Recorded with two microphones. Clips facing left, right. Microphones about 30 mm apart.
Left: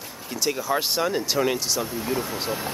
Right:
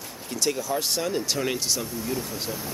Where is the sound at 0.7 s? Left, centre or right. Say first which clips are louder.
Left 3 dB; left; by 1.8 s centre.